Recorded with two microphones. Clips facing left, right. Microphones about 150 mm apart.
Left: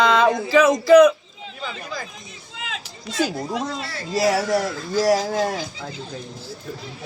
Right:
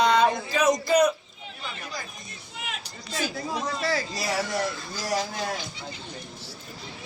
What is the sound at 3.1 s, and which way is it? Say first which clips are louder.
Speech: left 6 dB; 90° left.